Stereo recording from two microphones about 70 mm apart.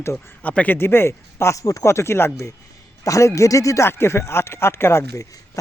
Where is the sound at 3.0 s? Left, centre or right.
Left.